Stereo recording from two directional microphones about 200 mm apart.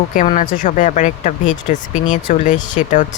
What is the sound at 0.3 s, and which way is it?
Speech, 40° left (ahead or behind).